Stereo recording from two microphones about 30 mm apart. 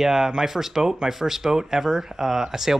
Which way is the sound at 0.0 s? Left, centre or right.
Centre.